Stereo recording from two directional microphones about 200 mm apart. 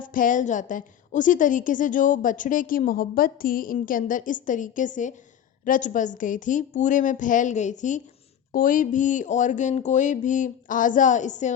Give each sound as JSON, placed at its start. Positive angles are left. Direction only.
{"t": 0.0, "sound": "a woman's voice", "side_deg": 40}